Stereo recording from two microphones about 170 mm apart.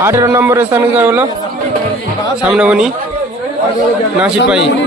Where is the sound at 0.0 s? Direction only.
15° right (ahead or behind).